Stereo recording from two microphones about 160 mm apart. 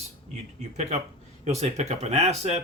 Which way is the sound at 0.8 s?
45° right (ahead or behind).